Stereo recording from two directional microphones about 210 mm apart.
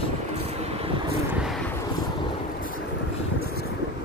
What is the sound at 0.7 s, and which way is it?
Vehicle, 30° right (ahead or behind).